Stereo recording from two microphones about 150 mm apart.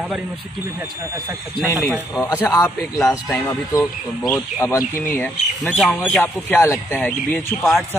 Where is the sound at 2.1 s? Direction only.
15° left (ahead or behind).